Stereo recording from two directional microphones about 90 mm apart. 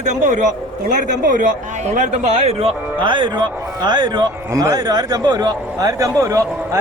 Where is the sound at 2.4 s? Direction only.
90° right; by 4.3 s 55° right (ahead or behind).